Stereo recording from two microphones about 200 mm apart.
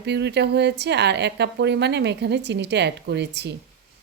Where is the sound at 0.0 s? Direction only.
60° right (ahead or behind).